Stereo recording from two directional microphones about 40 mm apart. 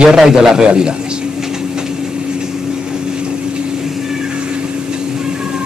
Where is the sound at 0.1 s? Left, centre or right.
Centre.